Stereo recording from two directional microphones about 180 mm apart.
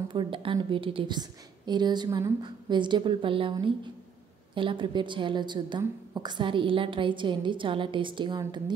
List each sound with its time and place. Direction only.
0.1 s a woman's voice: 30° right (ahead or behind)